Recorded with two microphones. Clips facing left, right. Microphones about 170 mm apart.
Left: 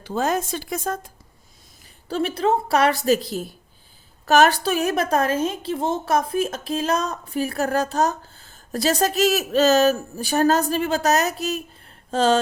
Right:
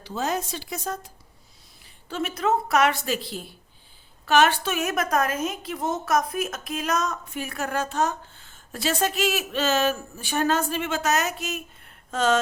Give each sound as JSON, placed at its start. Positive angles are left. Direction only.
{"t": 0.0, "sound": "speech", "side_deg": 50}
{"t": 1.8, "sound": "a woman's voice", "side_deg": 35}